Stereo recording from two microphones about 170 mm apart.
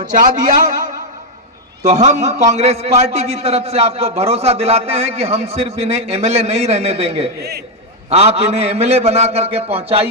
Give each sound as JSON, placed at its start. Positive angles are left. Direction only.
{"t": 0.0, "sound": "a man's voice", "side_deg": -50}
{"t": 7.3, "sound": "a man's voice", "side_deg": -70}
{"t": 8.1, "sound": "a man's voice", "side_deg": -40}